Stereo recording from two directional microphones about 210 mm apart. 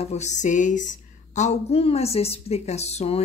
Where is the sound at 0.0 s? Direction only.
30° left (ahead or behind).